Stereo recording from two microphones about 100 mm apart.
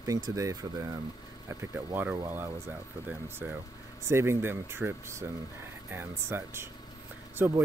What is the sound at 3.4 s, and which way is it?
Speech, 15° right (ahead or behind).